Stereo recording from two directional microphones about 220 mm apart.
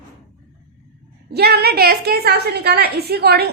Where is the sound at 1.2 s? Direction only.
45° right (ahead or behind).